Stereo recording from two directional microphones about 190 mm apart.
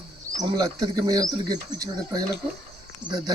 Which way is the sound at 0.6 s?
20° right (ahead or behind).